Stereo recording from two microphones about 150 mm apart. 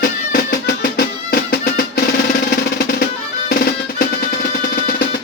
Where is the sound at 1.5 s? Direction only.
80° left.